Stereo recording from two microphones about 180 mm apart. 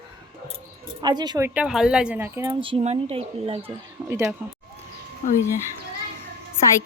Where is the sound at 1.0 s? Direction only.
25° right (ahead or behind).